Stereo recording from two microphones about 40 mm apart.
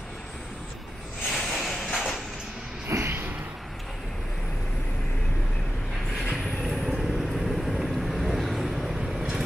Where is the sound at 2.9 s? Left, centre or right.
Right.